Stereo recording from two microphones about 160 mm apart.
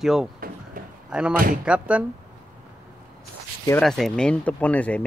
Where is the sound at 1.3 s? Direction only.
60° right (ahead or behind).